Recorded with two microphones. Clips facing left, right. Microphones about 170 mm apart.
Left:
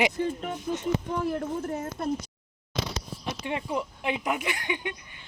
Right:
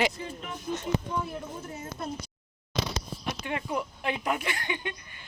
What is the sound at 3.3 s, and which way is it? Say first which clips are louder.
Speech: left 1 dB; 25° left (ahead or behind).